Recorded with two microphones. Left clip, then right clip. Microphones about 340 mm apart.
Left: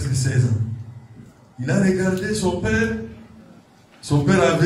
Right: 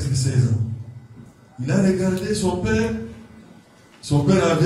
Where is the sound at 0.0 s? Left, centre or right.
Centre.